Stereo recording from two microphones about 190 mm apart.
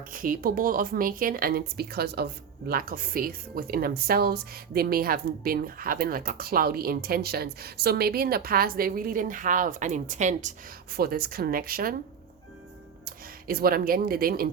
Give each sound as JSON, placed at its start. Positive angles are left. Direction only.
{"t": 0.1, "sound": "speech", "side_deg": -45}
{"t": 10.9, "sound": "speech", "side_deg": -50}
{"t": 13.1, "sound": "speech", "side_deg": -50}